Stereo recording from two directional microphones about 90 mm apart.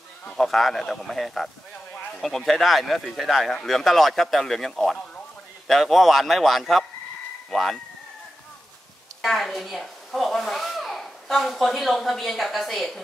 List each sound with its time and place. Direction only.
0.2 s speech: 10° left (ahead or behind)
0.5 s speech: centre (ahead or behind)
9.2 s speech: centre (ahead or behind)